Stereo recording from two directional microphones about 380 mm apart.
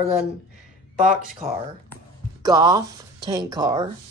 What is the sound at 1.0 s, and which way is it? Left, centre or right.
Speech, right.